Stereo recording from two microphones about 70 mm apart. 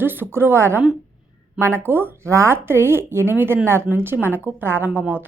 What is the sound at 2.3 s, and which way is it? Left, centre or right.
A woman's voice, right.